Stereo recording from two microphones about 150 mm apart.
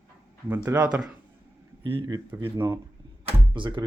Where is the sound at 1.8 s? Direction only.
35° right (ahead or behind).